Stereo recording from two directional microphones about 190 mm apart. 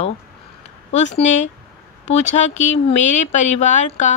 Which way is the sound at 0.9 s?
35° left (ahead or behind).